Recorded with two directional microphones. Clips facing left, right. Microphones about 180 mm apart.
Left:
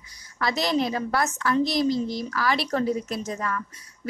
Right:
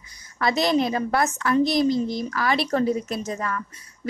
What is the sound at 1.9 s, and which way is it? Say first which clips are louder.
Speech: right 2 dB; 55° right (ahead or behind).